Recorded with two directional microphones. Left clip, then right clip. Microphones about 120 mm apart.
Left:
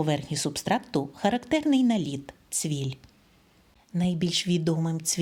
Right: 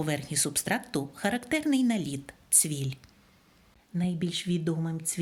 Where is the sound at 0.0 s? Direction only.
30° left (ahead or behind).